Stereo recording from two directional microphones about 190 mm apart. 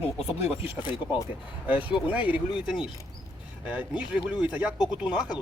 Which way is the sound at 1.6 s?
10° right (ahead or behind).